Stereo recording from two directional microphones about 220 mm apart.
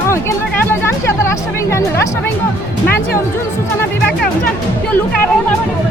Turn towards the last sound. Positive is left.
turn(degrees=10)  # may be behind; listen again after turning